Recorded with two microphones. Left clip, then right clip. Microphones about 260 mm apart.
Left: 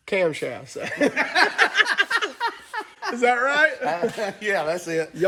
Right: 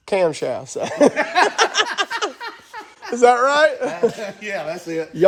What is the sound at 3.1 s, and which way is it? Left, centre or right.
Speech, centre.